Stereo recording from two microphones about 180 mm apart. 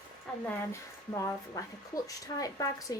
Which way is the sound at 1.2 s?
20° left (ahead or behind).